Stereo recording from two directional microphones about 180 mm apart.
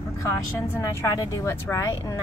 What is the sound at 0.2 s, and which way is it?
A woman's voice, 15° left (ahead or behind).